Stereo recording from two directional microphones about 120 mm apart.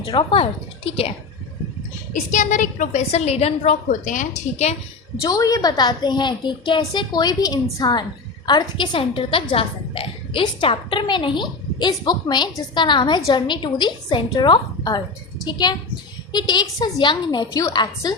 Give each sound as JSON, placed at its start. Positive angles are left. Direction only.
{"t": 0.0, "sound": "speech", "side_deg": 45}
{"t": 2.1, "sound": "a woman's voice", "side_deg": 90}
{"t": 5.2, "sound": "a woman's voice", "side_deg": 30}